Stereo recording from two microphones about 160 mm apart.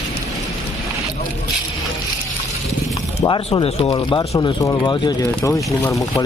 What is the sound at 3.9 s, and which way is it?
Speech, 25° left (ahead or behind).